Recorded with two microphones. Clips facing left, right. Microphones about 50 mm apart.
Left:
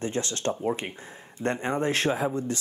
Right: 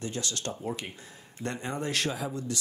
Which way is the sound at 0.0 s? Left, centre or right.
Left.